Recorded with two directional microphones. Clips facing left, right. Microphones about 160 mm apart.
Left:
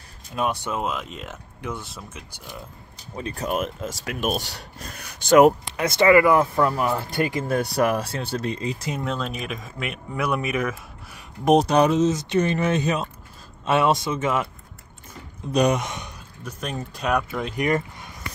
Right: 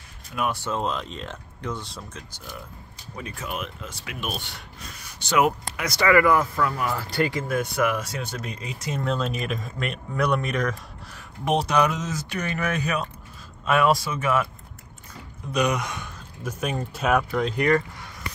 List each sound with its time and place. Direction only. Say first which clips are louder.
0.4 s speech: left 1 dB; 20° left (ahead or behind)
3.2 s speech: left 7 dB; 35° left (ahead or behind)
4.9 s speech: left 8 dB; 55° left (ahead or behind)
5.8 s speech: left 3 dB; 25° left (ahead or behind)
7.4 s speech: left 3 dB; 35° left (ahead or behind)
8.9 s speech: right 1 dB; centre (ahead or behind)
11.4 s speech: left 5 dB; 35° left (ahead or behind)
15.5 s speech: left 4 dB; 35° left (ahead or behind)
15.8 s speech: left 1 dB; 20° left (ahead or behind)
16.4 s speech: right 3 dB; 10° right (ahead or behind)
17.6 s speech: even; 20° left (ahead or behind)